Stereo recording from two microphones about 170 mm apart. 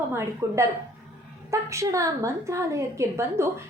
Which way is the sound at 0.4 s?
15° right (ahead or behind).